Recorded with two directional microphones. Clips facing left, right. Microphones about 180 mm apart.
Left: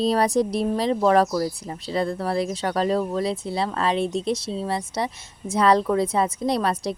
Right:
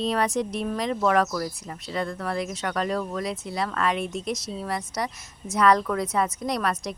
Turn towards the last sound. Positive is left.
turn(degrees=30)  # may be behind; listen again after turning